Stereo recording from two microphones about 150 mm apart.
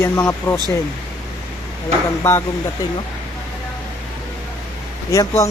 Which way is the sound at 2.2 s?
15° left (ahead or behind).